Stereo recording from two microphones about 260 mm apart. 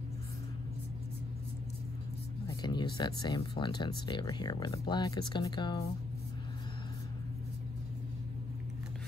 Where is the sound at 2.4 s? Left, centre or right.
Centre.